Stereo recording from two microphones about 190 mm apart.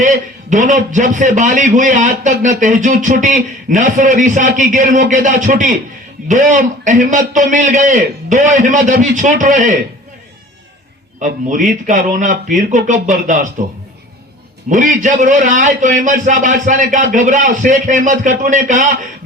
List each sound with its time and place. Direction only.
0.0 s a man's voice: 40° right (ahead or behind)
11.2 s a man's voice: 40° right (ahead or behind)
14.7 s a man's voice: 40° right (ahead or behind)